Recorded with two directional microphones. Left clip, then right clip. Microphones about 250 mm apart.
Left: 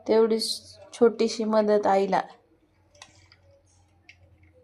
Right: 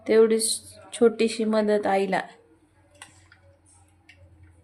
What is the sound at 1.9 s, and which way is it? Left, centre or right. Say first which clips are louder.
Speech: left 1 dB; centre.